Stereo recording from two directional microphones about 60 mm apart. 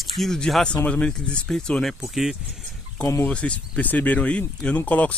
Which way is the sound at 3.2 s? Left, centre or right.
Centre.